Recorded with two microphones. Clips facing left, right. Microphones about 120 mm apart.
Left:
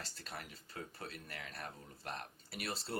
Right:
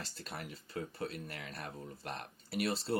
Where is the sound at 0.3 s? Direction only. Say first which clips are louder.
Right 4 dB; 35° right (ahead or behind).